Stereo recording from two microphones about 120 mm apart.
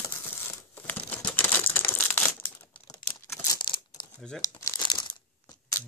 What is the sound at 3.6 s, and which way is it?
Crumpling, 40° left (ahead or behind).